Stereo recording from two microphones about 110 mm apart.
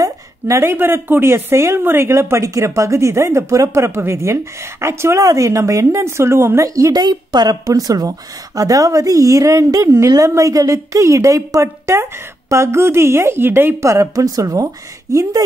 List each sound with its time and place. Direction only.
0.0 s a woman's voice: 25° right (ahead or behind)